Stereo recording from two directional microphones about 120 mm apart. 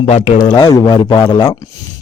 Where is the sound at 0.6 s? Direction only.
30° left (ahead or behind).